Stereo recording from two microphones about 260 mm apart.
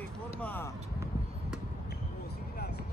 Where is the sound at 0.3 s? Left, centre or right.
Centre.